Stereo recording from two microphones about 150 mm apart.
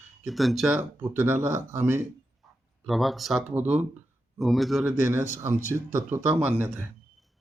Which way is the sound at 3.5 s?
10° right (ahead or behind).